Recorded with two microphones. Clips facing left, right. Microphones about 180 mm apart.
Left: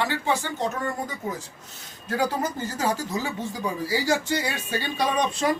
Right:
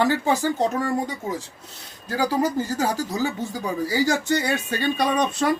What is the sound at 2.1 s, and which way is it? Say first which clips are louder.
Speech: right 3 dB; 35° right (ahead or behind).